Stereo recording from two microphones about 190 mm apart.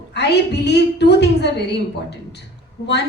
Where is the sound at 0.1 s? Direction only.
60° left (ahead or behind).